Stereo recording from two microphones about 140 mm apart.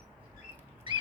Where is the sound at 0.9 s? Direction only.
35° right (ahead or behind).